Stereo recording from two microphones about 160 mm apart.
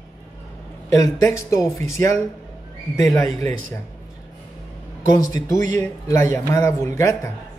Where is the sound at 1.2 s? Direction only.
20° left (ahead or behind).